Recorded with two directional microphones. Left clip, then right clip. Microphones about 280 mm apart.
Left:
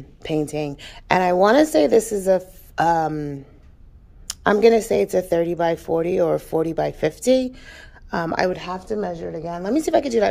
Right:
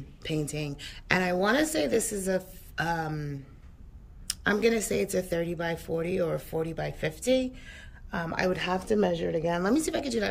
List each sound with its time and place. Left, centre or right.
0.2 s speech: centre
8.6 s speech: centre
9.6 s speech: centre